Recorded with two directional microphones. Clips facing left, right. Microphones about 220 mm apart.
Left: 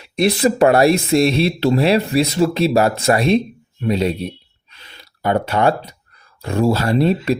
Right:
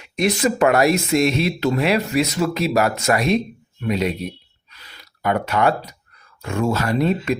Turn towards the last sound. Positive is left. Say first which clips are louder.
# left 3 dB
turn(degrees=30)  # may be behind; listen again after turning